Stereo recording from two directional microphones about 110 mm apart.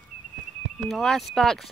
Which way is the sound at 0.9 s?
Centre (ahead or behind).